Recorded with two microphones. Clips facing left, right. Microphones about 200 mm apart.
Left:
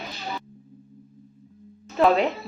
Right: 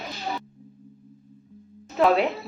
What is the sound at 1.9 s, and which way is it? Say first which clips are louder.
Music: left 1 dB; 5° right (ahead or behind).